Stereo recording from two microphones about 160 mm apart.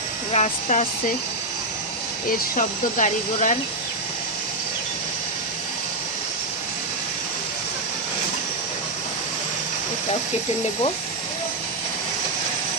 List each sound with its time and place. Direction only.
0.3 s speech: 45° left (ahead or behind)
2.6 s speech: 50° left (ahead or behind)